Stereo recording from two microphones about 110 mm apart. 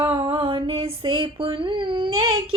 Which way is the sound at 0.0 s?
55° right (ahead or behind).